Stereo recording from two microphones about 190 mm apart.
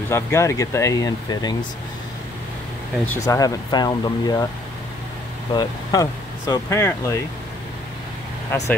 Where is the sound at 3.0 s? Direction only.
20° left (ahead or behind).